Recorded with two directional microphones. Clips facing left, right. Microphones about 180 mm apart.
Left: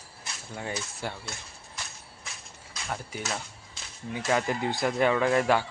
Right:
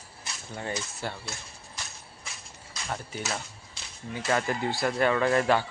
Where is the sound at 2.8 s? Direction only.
Centre (ahead or behind).